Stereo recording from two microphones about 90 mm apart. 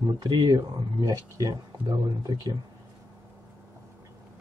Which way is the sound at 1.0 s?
40° right (ahead or behind).